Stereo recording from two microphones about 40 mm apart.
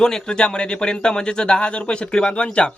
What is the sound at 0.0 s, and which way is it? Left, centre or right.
Speech, centre.